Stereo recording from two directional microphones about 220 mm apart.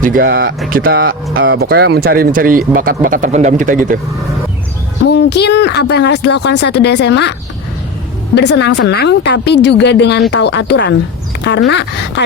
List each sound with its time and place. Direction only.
0.0 s speech: 40° right (ahead or behind)
5.0 s speech: 50° left (ahead or behind)
8.4 s speech: 50° left (ahead or behind)